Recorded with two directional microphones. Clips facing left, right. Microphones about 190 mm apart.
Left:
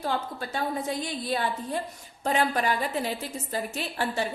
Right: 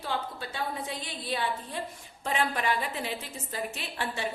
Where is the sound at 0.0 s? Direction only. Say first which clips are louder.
Left 4 dB; 45° left (ahead or behind).